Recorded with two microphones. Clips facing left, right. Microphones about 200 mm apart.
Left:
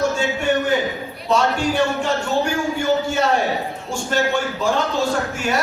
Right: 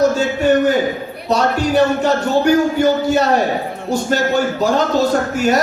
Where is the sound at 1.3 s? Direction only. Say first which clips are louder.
Right 3 dB; 40° right (ahead or behind).